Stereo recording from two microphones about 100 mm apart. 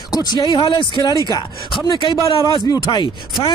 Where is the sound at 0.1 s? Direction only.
40° left (ahead or behind).